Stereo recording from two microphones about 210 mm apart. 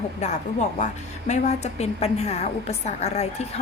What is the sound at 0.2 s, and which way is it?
A woman's voice, 35° left (ahead or behind).